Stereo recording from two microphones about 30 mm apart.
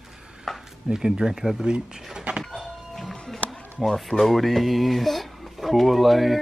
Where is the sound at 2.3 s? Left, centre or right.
Right.